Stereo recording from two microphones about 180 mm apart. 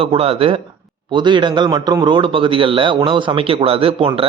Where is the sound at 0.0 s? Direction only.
30° right (ahead or behind).